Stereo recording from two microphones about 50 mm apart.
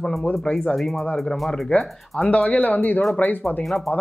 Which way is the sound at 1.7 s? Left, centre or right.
Left.